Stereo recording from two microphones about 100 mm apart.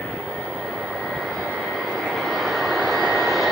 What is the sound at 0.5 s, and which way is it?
Vehicle, 5° right (ahead or behind).